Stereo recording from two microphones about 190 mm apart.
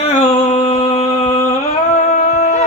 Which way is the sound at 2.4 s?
35° left (ahead or behind).